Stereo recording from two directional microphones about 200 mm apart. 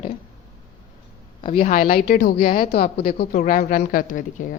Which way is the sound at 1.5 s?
45° left (ahead or behind).